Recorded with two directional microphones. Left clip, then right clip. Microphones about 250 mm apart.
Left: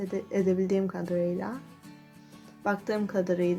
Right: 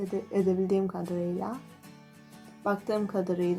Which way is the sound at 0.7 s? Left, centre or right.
Centre.